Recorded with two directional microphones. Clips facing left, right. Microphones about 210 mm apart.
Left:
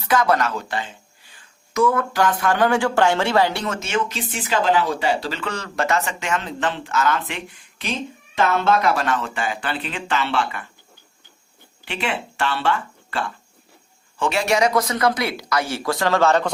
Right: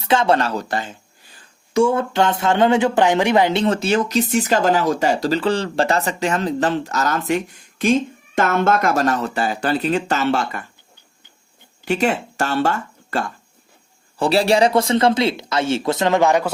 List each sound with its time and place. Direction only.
0.0 s speech: 25° right (ahead or behind); by 0.9 s 40° right (ahead or behind)
1.4 s speech: 30° right (ahead or behind)
11.9 s speech: 40° right (ahead or behind); by 16.5 s 15° right (ahead or behind)